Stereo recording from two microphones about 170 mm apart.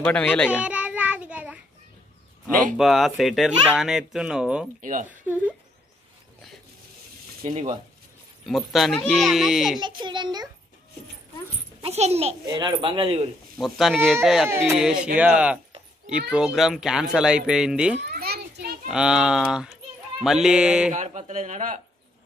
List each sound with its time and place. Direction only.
0.0 s a child's voice: 10° left (ahead or behind)
0.5 s child singing: 5° right (ahead or behind)
2.8 s speech: centre (ahead or behind)
8.5 s speech: centre (ahead or behind)
9.8 s a child's voice: 25° right (ahead or behind)
11.8 s a child's voice: 40° right (ahead or behind)
12.4 s a child's voice: 25° right (ahead or behind)
13.6 s speech: centre (ahead or behind)
18.1 s children playing: 65° right (ahead or behind)
18.9 s speech: 5° right (ahead or behind)
20.9 s speech: 45° right (ahead or behind)